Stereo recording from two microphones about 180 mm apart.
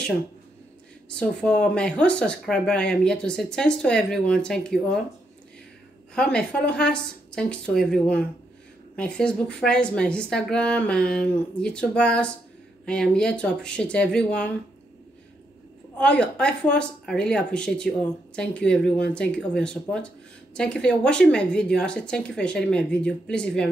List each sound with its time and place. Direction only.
1.2 s speech: 5° left (ahead or behind)
6.1 s speech: 5° left (ahead or behind)
16.0 s speech: 5° left (ahead or behind)